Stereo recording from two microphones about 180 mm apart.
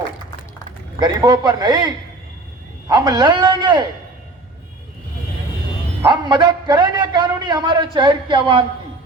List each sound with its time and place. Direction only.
0.9 s a man's voice: 25° right (ahead or behind)
6.0 s a man's voice: 25° right (ahead or behind)